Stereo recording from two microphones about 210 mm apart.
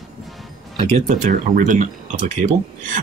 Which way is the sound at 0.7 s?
30° right (ahead or behind).